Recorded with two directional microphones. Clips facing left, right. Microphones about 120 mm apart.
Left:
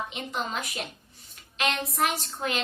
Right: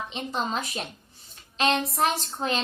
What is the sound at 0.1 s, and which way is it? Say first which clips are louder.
A woman's voice: right 3 dB; 30° right (ahead or behind).